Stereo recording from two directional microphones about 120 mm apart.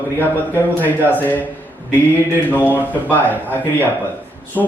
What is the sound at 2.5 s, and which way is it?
Speech, 15° left (ahead or behind).